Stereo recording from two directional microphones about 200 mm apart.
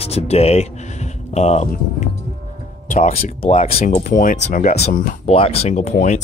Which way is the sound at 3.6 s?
45° left (ahead or behind).